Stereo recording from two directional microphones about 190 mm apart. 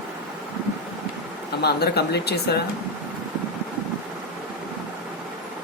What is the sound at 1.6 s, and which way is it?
Speech, 60° left (ahead or behind).